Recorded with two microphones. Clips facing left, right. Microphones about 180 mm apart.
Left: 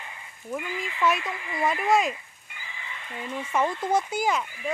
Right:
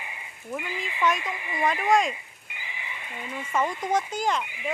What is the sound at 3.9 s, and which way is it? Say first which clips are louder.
Speech: even; 10° left (ahead or behind).